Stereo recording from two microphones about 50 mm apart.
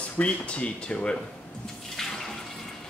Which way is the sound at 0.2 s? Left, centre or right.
Left.